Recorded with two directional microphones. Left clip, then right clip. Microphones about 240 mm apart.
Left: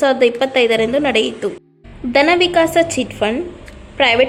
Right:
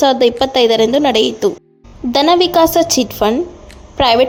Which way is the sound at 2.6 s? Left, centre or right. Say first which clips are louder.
Right 3 dB; right.